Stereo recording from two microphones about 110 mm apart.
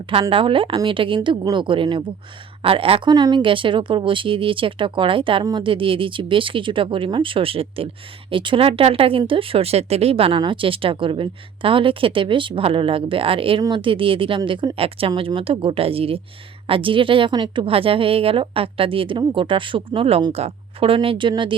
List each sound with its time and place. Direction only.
0.1 s a woman's voice: 55° right (ahead or behind)
3.1 s a woman's voice: 40° right (ahead or behind)